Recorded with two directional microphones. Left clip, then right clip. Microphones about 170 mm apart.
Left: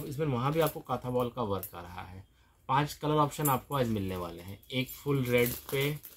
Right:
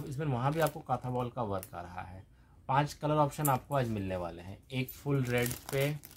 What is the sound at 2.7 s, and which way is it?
Speech, 10° right (ahead or behind).